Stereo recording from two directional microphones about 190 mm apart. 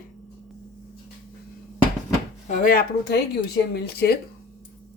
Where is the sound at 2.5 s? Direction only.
45° left (ahead or behind).